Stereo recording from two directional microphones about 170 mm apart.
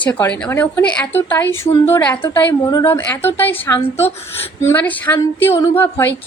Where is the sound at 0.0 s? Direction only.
10° left (ahead or behind).